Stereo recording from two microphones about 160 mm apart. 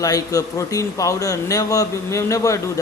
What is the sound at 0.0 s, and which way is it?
Speech, 20° left (ahead or behind).